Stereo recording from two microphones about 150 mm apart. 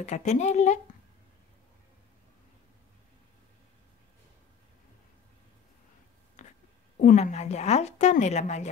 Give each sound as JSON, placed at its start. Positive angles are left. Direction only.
{"t": 0.0, "sound": "a woman's voice", "side_deg": 50}
{"t": 6.4, "sound": "a sound", "side_deg": 55}
{"t": 7.2, "sound": "a woman's voice", "side_deg": 45}